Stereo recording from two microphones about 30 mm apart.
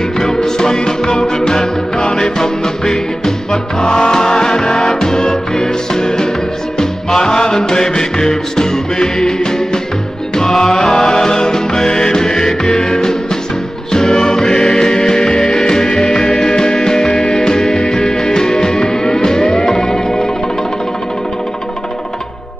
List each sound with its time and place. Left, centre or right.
0.2 s music: centre
4.7 s music: centre
10.7 s music: centre